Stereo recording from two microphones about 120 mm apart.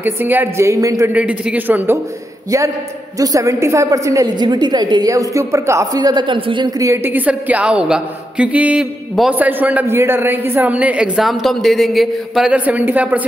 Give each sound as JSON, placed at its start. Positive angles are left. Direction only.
{"t": 0.0, "sound": "a woman's voice", "side_deg": -15}
{"t": 1.1, "sound": "a woman's voice", "side_deg": -10}
{"t": 3.2, "sound": "a woman's voice", "side_deg": -30}
{"t": 6.8, "sound": "a woman's voice", "side_deg": -20}
{"t": 12.5, "sound": "a woman's voice", "side_deg": -15}